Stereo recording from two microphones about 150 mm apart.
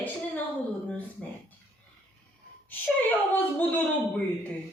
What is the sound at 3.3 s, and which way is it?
Speech, 10° left (ahead or behind).